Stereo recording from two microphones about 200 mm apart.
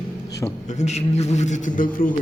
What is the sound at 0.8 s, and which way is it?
A man's voice, 35° left (ahead or behind).